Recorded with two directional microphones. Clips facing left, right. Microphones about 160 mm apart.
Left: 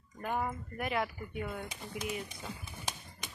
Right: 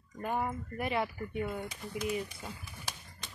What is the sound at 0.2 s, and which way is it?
A woman's voice, 5° right (ahead or behind).